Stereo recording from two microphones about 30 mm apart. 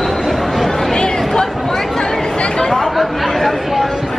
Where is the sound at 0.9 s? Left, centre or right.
Left.